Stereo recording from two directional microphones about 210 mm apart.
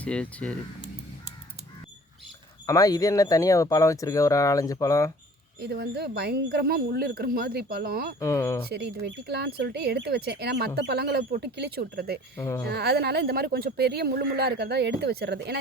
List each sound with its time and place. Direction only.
0.0 s speech: 5° left (ahead or behind)
2.6 s speech: 15° left (ahead or behind)
5.5 s speech: 50° right (ahead or behind)
8.2 s speech: 15° left (ahead or behind)
8.7 s speech: 50° right (ahead or behind)
12.4 s speech: 15° left (ahead or behind)
12.6 s speech: 50° right (ahead or behind)